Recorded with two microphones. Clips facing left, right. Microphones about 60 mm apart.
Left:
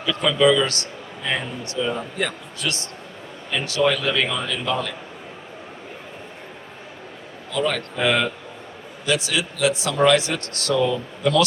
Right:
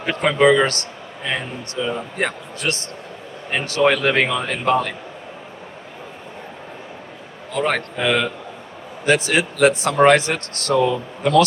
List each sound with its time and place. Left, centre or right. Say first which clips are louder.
0.0 s a man's voice: right 2 dB; right
1.8 s a man's voice: right 1 dB; centre
2.1 s a man's voice: right 3 dB; right
3.5 s a man's voice: right 3 dB; right
7.5 s a man's voice: right 2 dB; right
7.9 s a man's voice: left 1 dB; centre
9.0 s speech: right 5 dB; right
10.8 s a man's voice: right 4 dB; right